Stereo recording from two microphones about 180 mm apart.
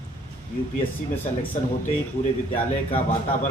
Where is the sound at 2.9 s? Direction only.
35° left (ahead or behind).